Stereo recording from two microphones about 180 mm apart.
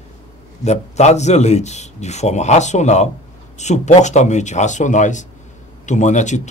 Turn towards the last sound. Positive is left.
turn(degrees=40)  # may be behind; listen again after turning